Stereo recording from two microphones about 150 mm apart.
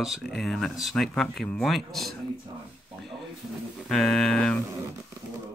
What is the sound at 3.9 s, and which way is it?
Speech, centre (ahead or behind).